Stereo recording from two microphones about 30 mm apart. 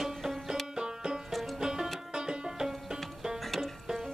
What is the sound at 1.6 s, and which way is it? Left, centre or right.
Music, right.